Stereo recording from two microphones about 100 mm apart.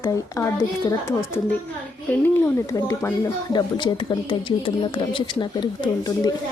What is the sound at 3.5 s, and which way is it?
Speech, 50° left (ahead or behind).